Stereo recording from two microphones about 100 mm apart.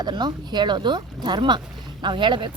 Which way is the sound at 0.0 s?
45° right (ahead or behind).